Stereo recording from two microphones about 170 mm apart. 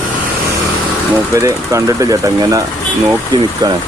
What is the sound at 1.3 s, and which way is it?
Speech, 20° right (ahead or behind).